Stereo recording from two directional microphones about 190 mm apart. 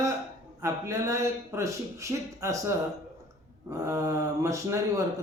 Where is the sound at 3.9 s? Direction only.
15° right (ahead or behind).